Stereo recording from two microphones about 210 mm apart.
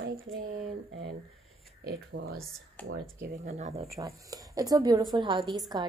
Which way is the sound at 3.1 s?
45° right (ahead or behind).